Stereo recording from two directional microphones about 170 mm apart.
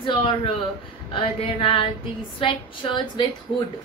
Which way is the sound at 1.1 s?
30° left (ahead or behind).